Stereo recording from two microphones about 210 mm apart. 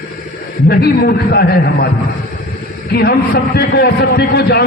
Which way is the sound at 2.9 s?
50° left (ahead or behind).